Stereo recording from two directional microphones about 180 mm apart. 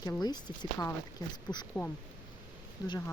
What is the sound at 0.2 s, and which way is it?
Speech, 25° left (ahead or behind).